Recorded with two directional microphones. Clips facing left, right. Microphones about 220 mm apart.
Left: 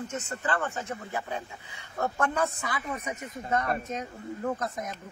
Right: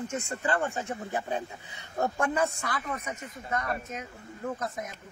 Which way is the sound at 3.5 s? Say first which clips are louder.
Left 3 dB; 35° left (ahead or behind).